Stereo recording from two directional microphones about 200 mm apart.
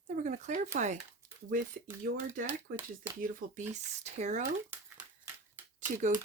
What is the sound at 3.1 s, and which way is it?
Speech, 35° right (ahead or behind).